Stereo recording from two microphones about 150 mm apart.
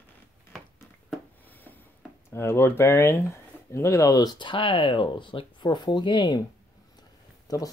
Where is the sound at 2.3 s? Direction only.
15° left (ahead or behind).